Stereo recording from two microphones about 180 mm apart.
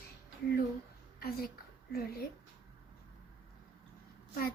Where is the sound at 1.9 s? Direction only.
55° left (ahead or behind).